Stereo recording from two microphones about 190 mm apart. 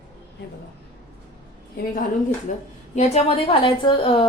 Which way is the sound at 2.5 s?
40° left (ahead or behind).